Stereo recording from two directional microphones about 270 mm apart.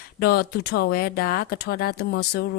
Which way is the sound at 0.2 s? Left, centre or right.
Left.